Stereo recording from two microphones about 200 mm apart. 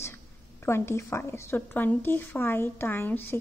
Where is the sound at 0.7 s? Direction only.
15° left (ahead or behind).